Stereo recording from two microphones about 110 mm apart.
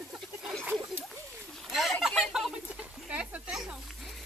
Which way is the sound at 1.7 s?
Centre (ahead or behind).